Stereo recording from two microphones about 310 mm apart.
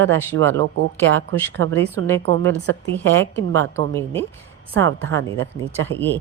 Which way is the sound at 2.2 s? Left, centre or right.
Right.